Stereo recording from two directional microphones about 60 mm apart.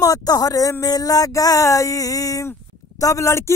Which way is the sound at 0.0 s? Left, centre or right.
Left.